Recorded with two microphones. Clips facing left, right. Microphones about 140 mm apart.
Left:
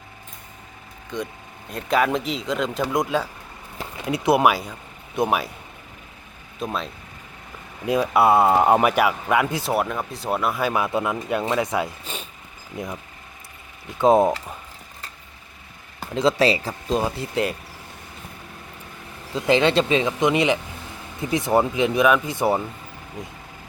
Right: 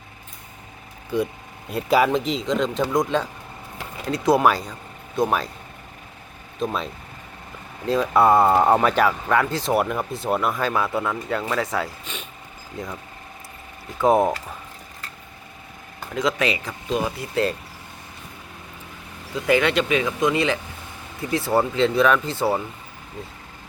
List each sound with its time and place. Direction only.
1.1 s speech: 10° right (ahead or behind); by 5.5 s 15° left (ahead or behind)
6.6 s speech: centre (ahead or behind)
7.9 s speech: 10° left (ahead or behind)
9.7 s speech: 5° right (ahead or behind); by 12.9 s 15° left (ahead or behind)
14.0 s speech: 20° left (ahead or behind)
16.1 s speech: 30° left (ahead or behind)
19.5 s speech: 25° left (ahead or behind)